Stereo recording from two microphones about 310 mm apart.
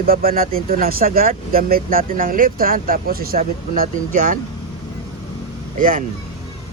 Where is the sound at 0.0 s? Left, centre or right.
Right.